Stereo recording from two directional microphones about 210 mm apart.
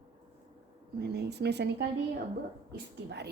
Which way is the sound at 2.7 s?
55° right (ahead or behind).